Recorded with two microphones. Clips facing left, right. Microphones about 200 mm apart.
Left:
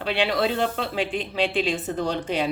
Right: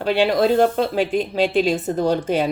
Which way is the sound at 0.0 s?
45° right (ahead or behind).